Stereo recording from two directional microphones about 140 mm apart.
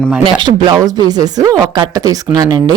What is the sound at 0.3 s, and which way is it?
Speech, 30° right (ahead or behind).